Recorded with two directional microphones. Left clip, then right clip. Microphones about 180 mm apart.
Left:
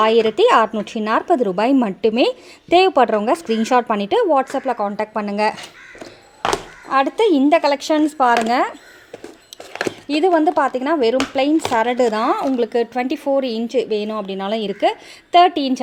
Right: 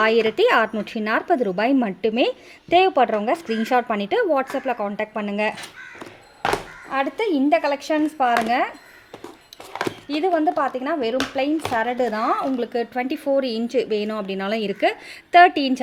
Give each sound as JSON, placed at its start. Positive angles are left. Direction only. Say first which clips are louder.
{"t": 0.0, "sound": "a woman's voice", "louder": "left 4 dB", "side_deg": 10}
{"t": 6.9, "sound": "speech", "louder": "left 7 dB", "side_deg": 40}
{"t": 10.1, "sound": "a woman's voice", "louder": "left 5 dB", "side_deg": 30}